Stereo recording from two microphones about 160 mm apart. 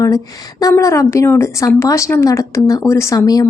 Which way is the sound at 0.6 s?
20° left (ahead or behind).